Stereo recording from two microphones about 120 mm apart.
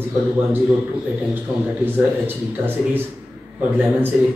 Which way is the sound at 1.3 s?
15° right (ahead or behind).